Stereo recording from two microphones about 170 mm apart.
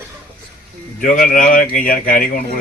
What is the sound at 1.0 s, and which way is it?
Speech, 50° left (ahead or behind).